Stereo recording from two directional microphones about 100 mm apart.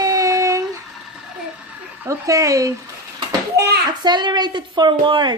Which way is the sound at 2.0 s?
35° right (ahead or behind).